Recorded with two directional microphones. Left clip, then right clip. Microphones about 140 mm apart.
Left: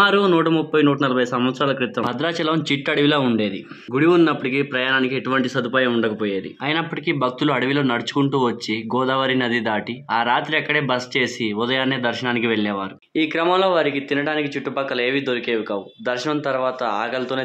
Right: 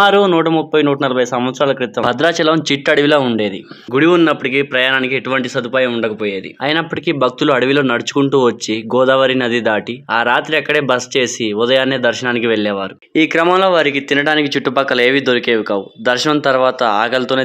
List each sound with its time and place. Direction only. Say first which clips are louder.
0.0 s speech: right 5 dB; 20° right (ahead or behind)
2.0 s speech: right 12 dB; 40° right (ahead or behind)
13.1 s speech: right 7 dB; 50° right (ahead or behind)